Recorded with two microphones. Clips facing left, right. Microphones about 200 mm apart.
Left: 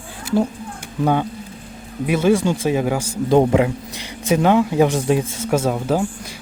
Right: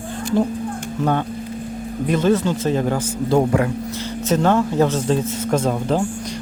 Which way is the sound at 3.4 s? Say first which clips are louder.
Left 3 dB; 20° left (ahead or behind).